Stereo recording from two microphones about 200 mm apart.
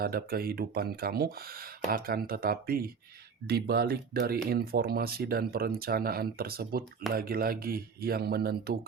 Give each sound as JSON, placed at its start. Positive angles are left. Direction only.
{"t": 0.0, "sound": "speech", "side_deg": -50}